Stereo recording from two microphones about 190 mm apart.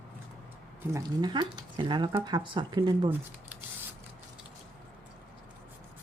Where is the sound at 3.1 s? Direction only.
10° right (ahead or behind).